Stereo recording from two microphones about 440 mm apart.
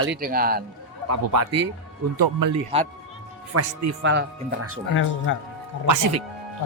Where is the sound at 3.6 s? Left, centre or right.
Right.